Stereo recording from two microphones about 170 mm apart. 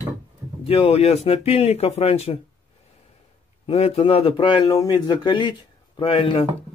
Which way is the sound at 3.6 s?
35° left (ahead or behind).